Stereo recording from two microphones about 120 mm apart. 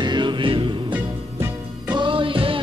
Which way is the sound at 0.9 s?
15° right (ahead or behind).